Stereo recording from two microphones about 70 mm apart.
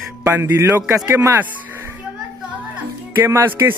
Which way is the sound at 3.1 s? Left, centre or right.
Right.